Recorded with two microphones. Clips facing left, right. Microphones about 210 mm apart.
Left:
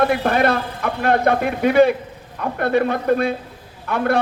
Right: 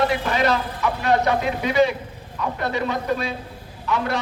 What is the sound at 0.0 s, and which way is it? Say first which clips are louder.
A man's voice: left 4 dB; 55° left (ahead or behind).